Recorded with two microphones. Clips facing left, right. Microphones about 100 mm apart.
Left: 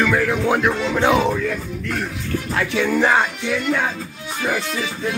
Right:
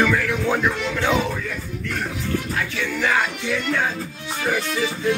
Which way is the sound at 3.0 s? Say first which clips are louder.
Left 3 dB; 30° left (ahead or behind).